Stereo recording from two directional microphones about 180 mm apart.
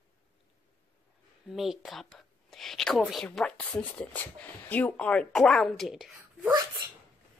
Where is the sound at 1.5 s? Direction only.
Centre (ahead or behind).